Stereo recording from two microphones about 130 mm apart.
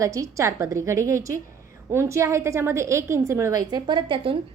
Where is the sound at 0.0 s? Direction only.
25° right (ahead or behind).